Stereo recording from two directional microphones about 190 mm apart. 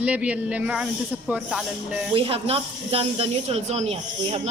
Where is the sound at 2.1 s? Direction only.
30° right (ahead or behind).